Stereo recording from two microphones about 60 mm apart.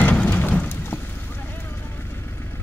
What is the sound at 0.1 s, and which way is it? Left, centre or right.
Rain, left.